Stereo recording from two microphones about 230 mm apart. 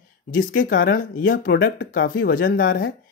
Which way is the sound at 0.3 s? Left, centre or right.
Left.